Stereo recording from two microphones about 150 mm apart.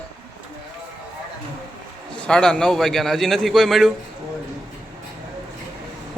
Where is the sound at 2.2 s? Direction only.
5° left (ahead or behind).